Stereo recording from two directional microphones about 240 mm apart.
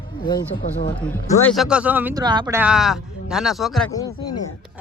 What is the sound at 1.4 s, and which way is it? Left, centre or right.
Speech, centre.